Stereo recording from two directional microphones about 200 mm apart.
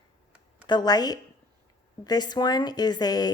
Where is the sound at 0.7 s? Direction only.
20° left (ahead or behind).